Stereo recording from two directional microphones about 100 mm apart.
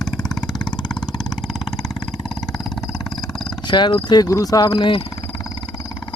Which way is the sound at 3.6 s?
50° left (ahead or behind).